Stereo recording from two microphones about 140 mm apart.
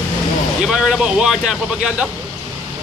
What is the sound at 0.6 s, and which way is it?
Speech, 5° right (ahead or behind).